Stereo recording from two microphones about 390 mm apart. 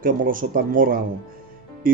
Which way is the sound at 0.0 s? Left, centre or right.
Right.